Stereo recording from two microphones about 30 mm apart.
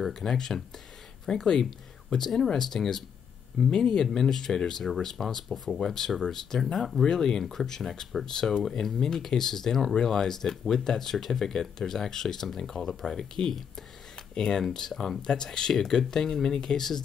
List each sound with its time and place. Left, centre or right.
0.1 s speech: centre
13.2 s speech: centre
14.3 s speech: left
14.9 s speech: centre
15.2 s speech: left